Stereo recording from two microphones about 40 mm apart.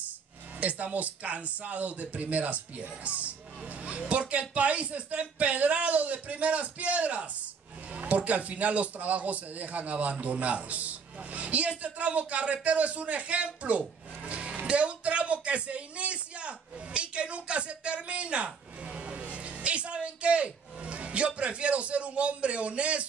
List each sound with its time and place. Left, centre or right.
0.6 s speech: right